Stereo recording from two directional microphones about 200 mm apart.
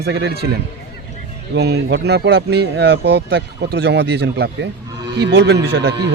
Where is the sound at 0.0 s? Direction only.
55° right (ahead or behind).